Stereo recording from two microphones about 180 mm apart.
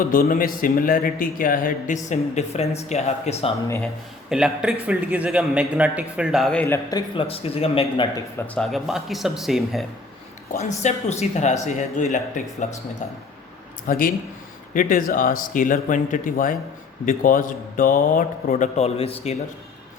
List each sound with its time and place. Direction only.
0.0 s a man's voice: 50° left (ahead or behind)
2.0 s speech: 40° left (ahead or behind)
4.3 s a man's voice: 5° right (ahead or behind)
6.9 s speech: 30° left (ahead or behind)
8.5 s a man's voice: centre (ahead or behind)
10.5 s a man's voice: 40° left (ahead or behind)
13.8 s a man's voice: 50° left (ahead or behind); by 19.4 s 35° left (ahead or behind)